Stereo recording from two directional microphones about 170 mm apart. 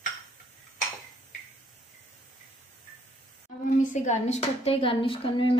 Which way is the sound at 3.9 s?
45° left (ahead or behind).